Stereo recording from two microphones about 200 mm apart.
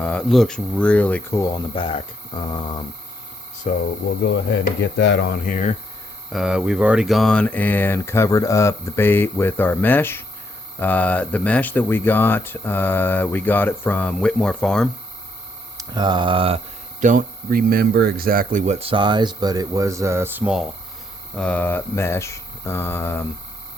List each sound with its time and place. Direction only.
0.0 s speech: 5° left (ahead or behind)
1.7 s speech: 25° left (ahead or behind)
3.6 s speech: 45° left (ahead or behind)
4.2 s speech: 60° left (ahead or behind); by 5.7 s 40° left (ahead or behind)
6.3 s speech: 5° right (ahead or behind)
15.8 s speech: 20° right (ahead or behind)
17.0 s speech: 40° right (ahead or behind); by 20.7 s 5° right (ahead or behind)
21.3 s speech: 5° left (ahead or behind)